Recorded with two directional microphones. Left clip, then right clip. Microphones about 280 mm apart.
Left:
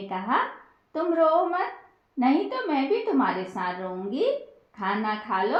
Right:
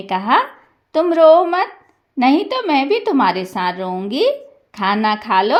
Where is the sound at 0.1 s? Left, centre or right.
Right.